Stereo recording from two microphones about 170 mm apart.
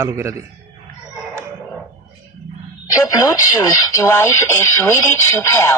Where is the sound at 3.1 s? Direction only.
20° left (ahead or behind).